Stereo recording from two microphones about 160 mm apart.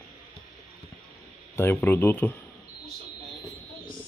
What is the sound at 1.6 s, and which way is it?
Speech, 15° left (ahead or behind).